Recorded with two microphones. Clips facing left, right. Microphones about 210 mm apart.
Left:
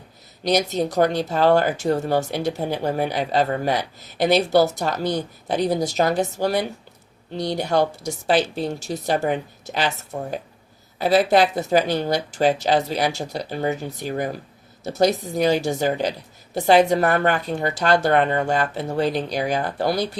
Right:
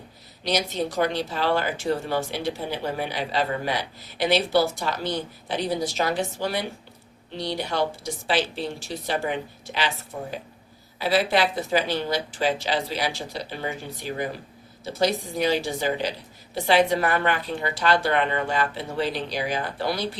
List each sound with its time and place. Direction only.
0.4 s speech: 45° left (ahead or behind)